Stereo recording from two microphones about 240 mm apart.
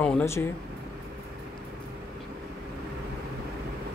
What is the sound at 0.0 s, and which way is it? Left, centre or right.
Speech, centre.